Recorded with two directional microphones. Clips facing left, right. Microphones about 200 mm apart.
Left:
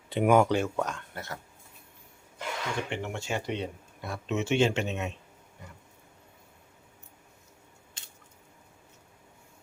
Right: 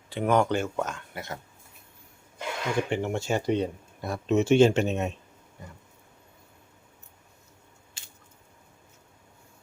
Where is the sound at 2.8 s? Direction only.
40° right (ahead or behind).